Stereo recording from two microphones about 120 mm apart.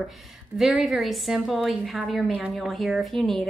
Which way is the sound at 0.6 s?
5° right (ahead or behind).